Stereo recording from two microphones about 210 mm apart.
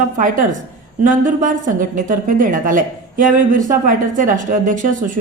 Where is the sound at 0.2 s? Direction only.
40° right (ahead or behind).